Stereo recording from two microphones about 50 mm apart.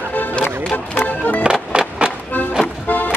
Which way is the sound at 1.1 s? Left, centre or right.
Left.